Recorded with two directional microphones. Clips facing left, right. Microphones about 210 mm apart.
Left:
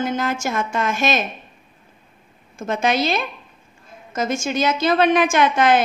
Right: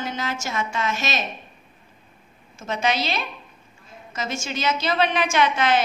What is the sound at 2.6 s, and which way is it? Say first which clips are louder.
A woman's voice: left 4 dB; 50° left (ahead or behind).